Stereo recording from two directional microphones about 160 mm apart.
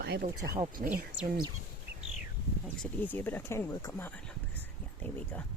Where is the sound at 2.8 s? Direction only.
10° left (ahead or behind).